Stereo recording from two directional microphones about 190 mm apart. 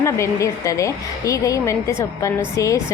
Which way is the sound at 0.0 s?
15° left (ahead or behind).